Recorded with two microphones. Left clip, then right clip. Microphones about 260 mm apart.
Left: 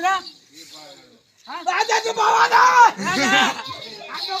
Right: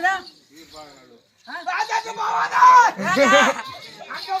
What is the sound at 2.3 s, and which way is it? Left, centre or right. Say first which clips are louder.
Speech: even; left.